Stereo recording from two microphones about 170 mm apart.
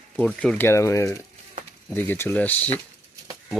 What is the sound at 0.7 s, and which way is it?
Speech, 20° left (ahead or behind).